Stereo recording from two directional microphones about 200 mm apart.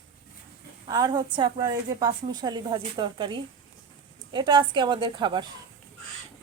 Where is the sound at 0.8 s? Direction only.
20° right (ahead or behind).